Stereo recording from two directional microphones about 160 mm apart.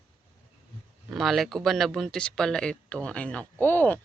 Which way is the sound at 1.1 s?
Centre (ahead or behind).